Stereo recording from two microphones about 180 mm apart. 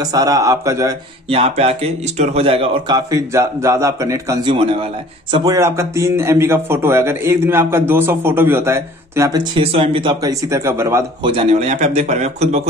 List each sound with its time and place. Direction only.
0.0 s a man's voice: 20° right (ahead or behind)
1.3 s speech: 35° right (ahead or behind)
3.1 s a man's voice: 15° right (ahead or behind)
4.5 s a man's voice: 30° right (ahead or behind)
10.5 s a man's voice: 15° right (ahead or behind)
11.2 s speech: 35° right (ahead or behind)